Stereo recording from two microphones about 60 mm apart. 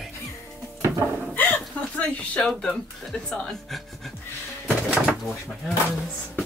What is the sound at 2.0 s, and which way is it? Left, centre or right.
Speech, left.